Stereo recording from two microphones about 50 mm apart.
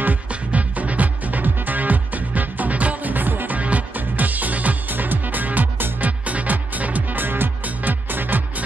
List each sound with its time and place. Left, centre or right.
0.3 s music: right